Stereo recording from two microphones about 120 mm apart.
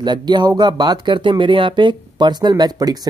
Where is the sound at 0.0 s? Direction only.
40° right (ahead or behind).